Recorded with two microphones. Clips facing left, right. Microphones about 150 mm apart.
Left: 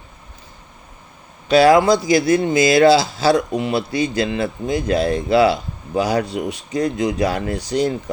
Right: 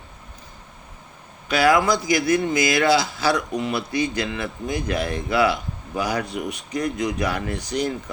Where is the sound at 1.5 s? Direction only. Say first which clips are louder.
Left 6 dB; 30° left (ahead or behind).